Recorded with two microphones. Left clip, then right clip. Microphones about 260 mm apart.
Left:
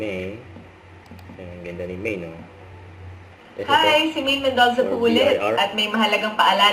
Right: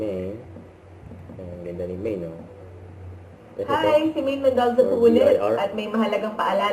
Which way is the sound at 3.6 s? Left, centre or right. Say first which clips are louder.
Left 3 dB; centre.